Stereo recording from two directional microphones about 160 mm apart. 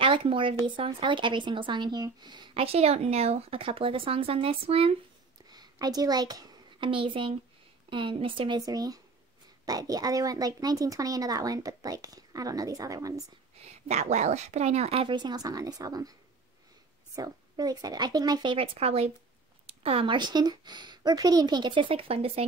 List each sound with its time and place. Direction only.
0.0 s speech: 35° right (ahead or behind)
5.5 s a woman's voice: 25° right (ahead or behind)
13.7 s speech: 45° right (ahead or behind)